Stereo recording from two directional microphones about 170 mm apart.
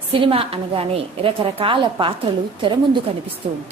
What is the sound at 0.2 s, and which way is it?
A woman's voice, 35° right (ahead or behind).